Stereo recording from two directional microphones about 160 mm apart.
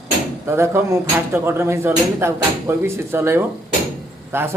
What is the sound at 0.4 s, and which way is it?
Speech, 15° right (ahead or behind).